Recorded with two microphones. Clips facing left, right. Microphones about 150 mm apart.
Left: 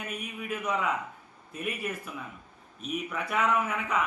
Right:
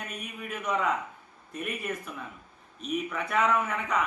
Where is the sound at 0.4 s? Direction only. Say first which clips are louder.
Right 1 dB; 5° left (ahead or behind).